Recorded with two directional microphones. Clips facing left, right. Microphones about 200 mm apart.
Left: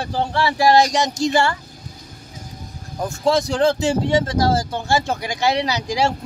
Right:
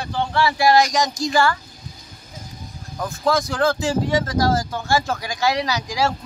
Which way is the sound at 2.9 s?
25° left (ahead or behind).